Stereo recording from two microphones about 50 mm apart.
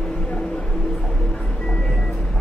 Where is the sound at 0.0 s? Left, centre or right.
Centre.